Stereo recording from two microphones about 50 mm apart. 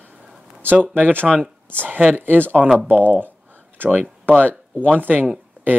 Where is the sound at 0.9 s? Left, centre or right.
Right.